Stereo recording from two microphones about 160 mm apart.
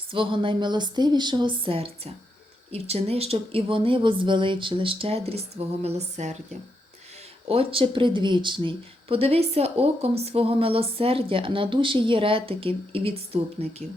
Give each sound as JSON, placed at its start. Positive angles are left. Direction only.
{"t": 0.1, "sound": "speech", "side_deg": -30}
{"t": 7.4, "sound": "speech", "side_deg": -35}